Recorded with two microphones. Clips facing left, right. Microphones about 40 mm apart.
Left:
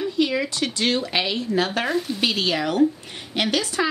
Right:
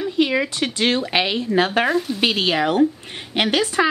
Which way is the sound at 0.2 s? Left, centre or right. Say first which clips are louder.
Right 3 dB; right.